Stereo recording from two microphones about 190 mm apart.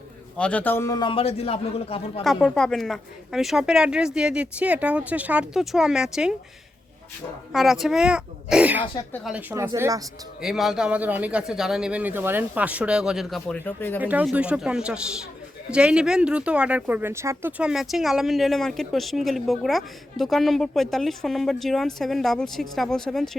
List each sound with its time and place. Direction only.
0.3 s a man's voice: 5° left (ahead or behind); by 2.2 s 30° left (ahead or behind)
2.2 s speech: centre (ahead or behind)
7.5 s speech: centre (ahead or behind)
10.4 s speech: centre (ahead or behind)
14.0 s speech: 10° right (ahead or behind)